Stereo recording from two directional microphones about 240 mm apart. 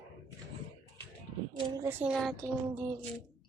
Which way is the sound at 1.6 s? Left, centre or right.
Centre.